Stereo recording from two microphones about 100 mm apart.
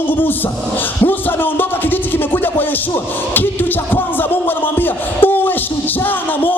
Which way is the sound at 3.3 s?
20° left (ahead or behind).